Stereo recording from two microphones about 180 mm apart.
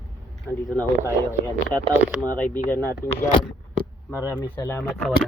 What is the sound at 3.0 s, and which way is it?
Speech, 50° left (ahead or behind).